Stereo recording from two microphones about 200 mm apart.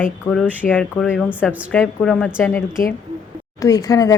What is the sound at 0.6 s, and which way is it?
A woman's voice, 5° left (ahead or behind).